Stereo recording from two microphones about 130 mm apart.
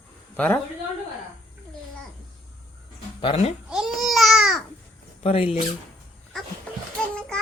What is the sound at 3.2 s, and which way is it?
Speech, 45° left (ahead or behind).